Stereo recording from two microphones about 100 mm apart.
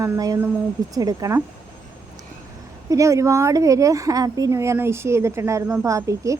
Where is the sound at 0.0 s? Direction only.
35° right (ahead or behind).